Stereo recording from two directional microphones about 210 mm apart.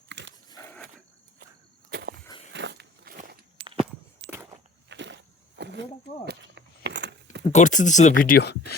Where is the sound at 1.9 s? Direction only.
50° right (ahead or behind).